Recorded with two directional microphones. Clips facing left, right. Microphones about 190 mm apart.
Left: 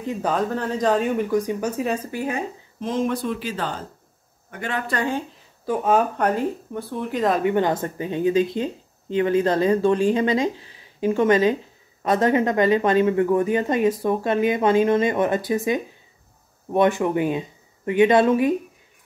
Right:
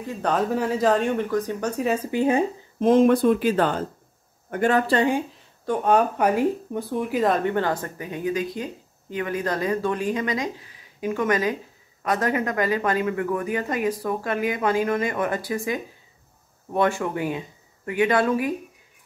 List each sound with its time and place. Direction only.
0.2 s speech: centre (ahead or behind)
2.0 s speech: 25° right (ahead or behind)
2.8 s speech: 55° right (ahead or behind)
4.9 s speech: 20° right (ahead or behind)
5.3 s speech: centre (ahead or behind)
7.4 s speech: 15° left (ahead or behind)